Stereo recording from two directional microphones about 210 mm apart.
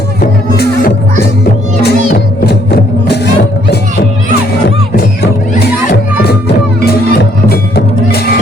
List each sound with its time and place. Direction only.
0.2 s music: 50° left (ahead or behind)
4.9 s music: 50° left (ahead or behind)